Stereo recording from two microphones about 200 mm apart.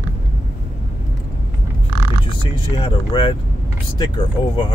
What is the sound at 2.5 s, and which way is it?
Speech, 25° left (ahead or behind).